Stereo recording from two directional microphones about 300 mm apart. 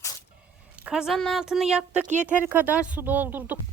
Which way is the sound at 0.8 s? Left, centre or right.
Centre.